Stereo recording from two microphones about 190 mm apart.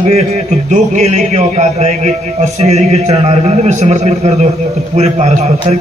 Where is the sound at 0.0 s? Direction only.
35° right (ahead or behind).